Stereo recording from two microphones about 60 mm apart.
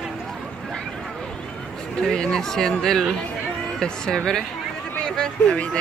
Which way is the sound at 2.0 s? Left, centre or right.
Centre.